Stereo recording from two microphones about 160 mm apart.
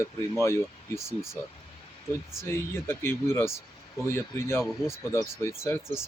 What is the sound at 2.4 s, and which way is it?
Speech, 15° left (ahead or behind).